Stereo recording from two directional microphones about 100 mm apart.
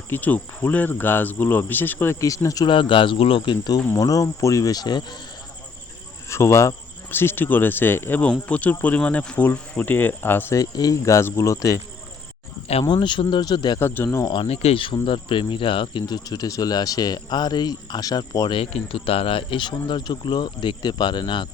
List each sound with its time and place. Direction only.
0.1 s speech: 15° left (ahead or behind)
2.2 s speech: 35° left (ahead or behind)
2.6 s speech: 55° left (ahead or behind)
3.9 s speech: 35° left (ahead or behind)
6.2 s speech: 30° left (ahead or behind)
10.5 s speech: 40° left (ahead or behind)
12.9 s speech: 55° left (ahead or behind)
13.7 s speech: 20° left (ahead or behind)
14.4 s speech: 85° left
15.0 s speech: 55° left (ahead or behind)
18.6 s speech: 75° left (ahead or behind); by 21.4 s 50° left (ahead or behind)